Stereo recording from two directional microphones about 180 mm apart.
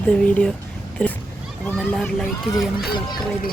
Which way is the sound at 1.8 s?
Centre (ahead or behind).